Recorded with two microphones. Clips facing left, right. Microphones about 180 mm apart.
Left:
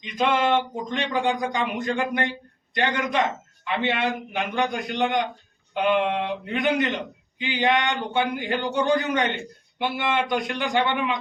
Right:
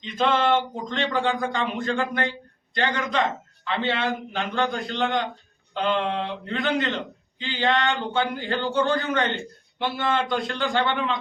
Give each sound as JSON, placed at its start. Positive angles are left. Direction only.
{"t": 0.0, "sound": "a man's voice", "side_deg": 10}